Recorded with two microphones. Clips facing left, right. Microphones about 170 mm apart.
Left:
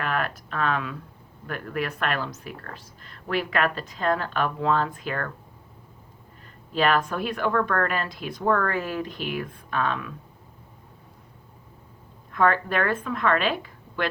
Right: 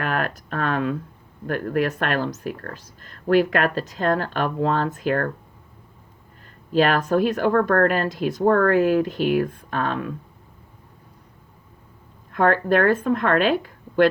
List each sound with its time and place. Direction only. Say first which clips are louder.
0.0 s speech: right 3 dB; 45° right (ahead or behind)
6.7 s speech: right 5 dB; 45° right (ahead or behind)
12.3 s speech: right 4 dB; 45° right (ahead or behind)